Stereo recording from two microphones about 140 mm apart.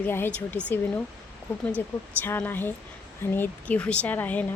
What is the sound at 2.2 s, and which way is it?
Speech, 15° left (ahead or behind).